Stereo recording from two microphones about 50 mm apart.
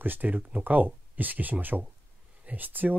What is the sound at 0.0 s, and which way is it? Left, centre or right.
Speech, right.